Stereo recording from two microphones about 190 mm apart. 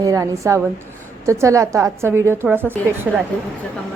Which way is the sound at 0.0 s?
15° right (ahead or behind).